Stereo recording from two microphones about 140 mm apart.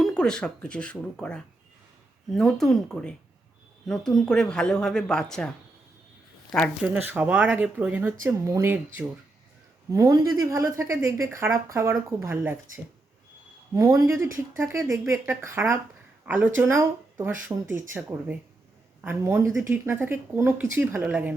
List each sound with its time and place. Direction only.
0.0 s a man's voice: 5° left (ahead or behind)
6.5 s a man's voice: centre (ahead or behind)
6.8 s speech: 15° right (ahead or behind)
9.9 s speech: 25° right (ahead or behind)
13.7 s speech: 25° right (ahead or behind)